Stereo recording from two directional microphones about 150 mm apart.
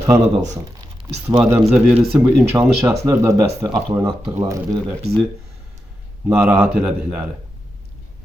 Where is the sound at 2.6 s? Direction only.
20° right (ahead or behind).